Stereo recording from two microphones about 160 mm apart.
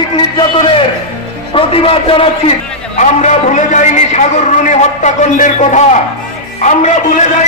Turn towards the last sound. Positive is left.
turn(degrees=45)  # may be behind; listen again after turning